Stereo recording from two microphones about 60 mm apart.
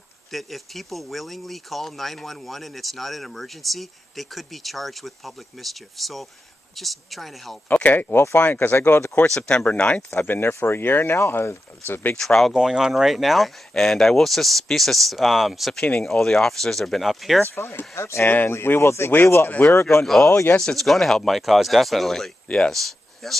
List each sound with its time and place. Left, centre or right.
0.3 s speech: centre
7.6 s speech: left
8.1 s speech: left
9.3 s speech: centre
10.2 s speech: left
12.2 s speech: centre
12.5 s speech: centre
15.8 s speech: centre
17.6 s speech: left
18.2 s speech: left
19.4 s speech: left
19.7 s speech: left
20.0 s speech: centre